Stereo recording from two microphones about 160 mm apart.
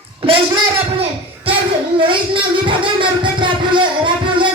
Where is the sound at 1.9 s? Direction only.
30° right (ahead or behind).